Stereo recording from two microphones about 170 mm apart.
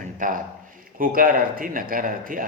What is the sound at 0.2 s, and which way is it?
A man's voice, 50° right (ahead or behind).